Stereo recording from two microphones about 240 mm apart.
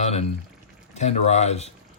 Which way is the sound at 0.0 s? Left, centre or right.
Left.